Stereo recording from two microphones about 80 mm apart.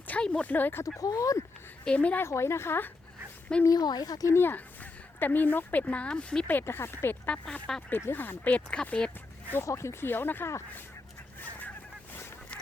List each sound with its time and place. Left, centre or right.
0.1 s speech: centre
0.9 s speech: left
1.8 s speech: centre
2.2 s a woman's voice: left
3.6 s speech: left
4.4 s speech: left
6.5 s speech: left
9.6 s speech: left